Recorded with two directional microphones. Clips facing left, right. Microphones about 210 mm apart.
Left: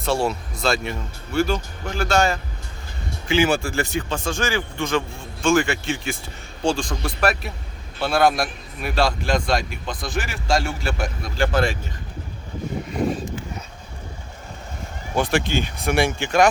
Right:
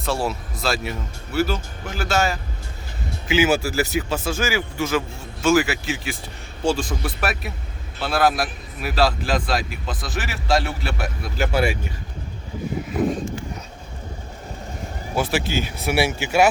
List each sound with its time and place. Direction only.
0.0 s a man's voice: centre (ahead or behind)
15.1 s speech: 5° right (ahead or behind)